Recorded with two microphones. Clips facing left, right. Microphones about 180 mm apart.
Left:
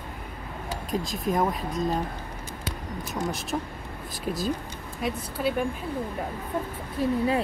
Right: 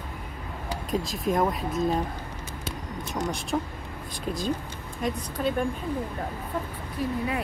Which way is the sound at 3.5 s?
5° left (ahead or behind).